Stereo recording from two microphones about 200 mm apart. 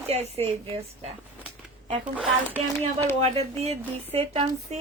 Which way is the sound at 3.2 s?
30° right (ahead or behind).